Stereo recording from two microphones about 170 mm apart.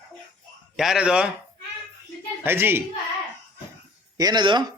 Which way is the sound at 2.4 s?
15° right (ahead or behind).